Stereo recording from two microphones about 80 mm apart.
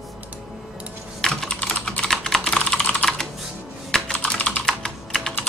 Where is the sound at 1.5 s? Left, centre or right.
Centre.